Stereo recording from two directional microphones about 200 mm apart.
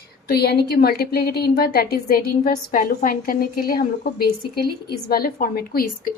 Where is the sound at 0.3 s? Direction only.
55° left (ahead or behind).